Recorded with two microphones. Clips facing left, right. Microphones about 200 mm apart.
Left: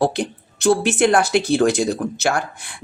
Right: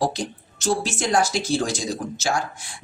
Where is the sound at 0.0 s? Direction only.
60° left (ahead or behind).